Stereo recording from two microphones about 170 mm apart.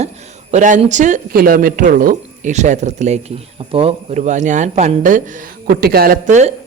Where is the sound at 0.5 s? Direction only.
45° right (ahead or behind).